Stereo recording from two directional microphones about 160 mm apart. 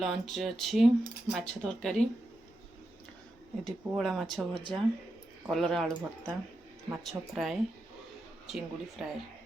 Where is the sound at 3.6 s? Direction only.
Centre (ahead or behind).